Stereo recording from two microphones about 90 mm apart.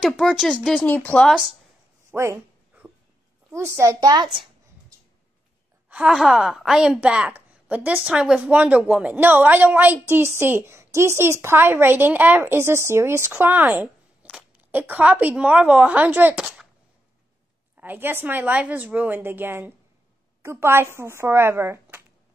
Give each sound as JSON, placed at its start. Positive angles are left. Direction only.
{"t": 0.2, "sound": "speech", "side_deg": 0}
{"t": 0.8, "sound": "speech", "side_deg": 15}
{"t": 2.0, "sound": "a sound", "side_deg": -30}
{"t": 3.5, "sound": "a child's voice", "side_deg": -30}
{"t": 6.0, "sound": "a woman's voice", "side_deg": -5}
{"t": 17.7, "sound": "a woman's voice", "side_deg": -20}